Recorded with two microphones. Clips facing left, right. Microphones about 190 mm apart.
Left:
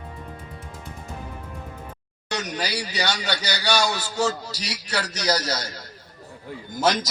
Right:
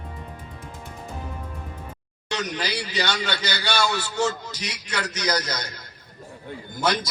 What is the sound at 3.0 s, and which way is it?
A man's voice, 40° left (ahead or behind).